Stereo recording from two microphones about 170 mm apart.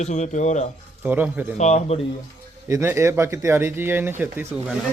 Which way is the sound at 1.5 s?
40° left (ahead or behind).